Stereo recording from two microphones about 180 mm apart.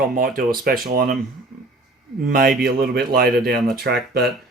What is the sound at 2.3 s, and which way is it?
Speech, 55° right (ahead or behind).